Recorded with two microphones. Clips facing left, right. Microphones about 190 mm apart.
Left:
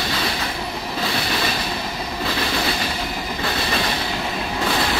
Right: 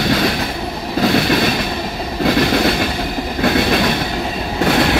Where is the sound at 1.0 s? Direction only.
55° right (ahead or behind).